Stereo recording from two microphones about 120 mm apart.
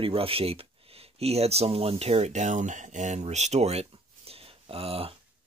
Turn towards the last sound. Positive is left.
turn(degrees=-55)  # may be behind; listen again after turning